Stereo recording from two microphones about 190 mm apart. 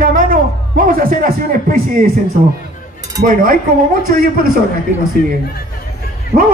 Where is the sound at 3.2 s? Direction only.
50° right (ahead or behind).